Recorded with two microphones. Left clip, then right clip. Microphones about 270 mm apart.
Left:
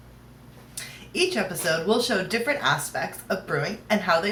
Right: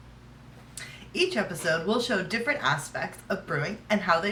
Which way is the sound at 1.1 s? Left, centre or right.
Centre.